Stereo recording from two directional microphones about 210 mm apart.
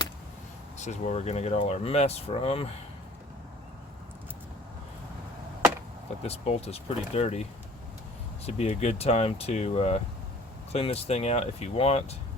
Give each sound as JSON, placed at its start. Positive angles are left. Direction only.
{"t": 0.8, "sound": "speech", "side_deg": 35}
{"t": 6.2, "sound": "speech", "side_deg": 30}
{"t": 8.4, "sound": "speech", "side_deg": 30}